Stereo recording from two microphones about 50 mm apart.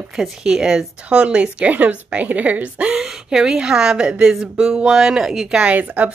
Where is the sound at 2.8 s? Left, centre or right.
Centre.